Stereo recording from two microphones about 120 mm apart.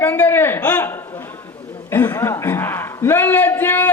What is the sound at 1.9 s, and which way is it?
A man's voice, 15° left (ahead or behind).